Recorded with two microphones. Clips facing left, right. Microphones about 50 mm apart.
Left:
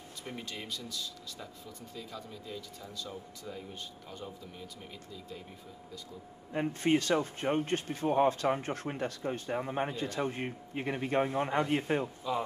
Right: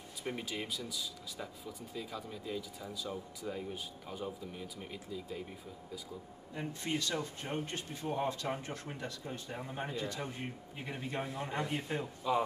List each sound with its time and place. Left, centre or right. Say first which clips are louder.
0.2 s speech: right 3 dB; centre
6.5 s speech: left 9 dB; left
12.2 s speech: right 3 dB; centre